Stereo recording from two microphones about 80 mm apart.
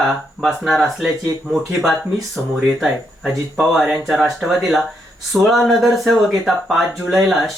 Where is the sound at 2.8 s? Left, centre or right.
Centre.